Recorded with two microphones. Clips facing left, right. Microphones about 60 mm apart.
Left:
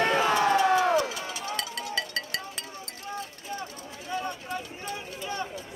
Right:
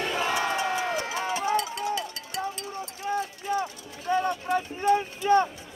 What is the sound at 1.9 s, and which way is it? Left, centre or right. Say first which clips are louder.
Music: even; left.